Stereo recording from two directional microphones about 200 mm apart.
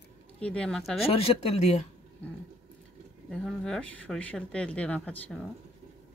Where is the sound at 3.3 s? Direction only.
Centre (ahead or behind).